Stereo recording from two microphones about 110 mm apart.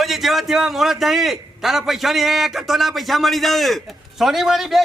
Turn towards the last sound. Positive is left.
turn(degrees=0)  # may be behind; listen again after turning